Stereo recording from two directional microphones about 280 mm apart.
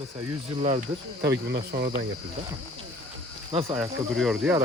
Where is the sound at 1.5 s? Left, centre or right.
Right.